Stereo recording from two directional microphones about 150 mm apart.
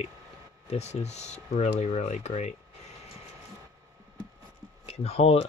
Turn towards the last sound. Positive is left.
turn(degrees=45)  # may be behind; listen again after turning